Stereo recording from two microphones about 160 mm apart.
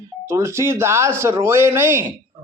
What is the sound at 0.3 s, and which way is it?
A man's voice, 15° right (ahead or behind).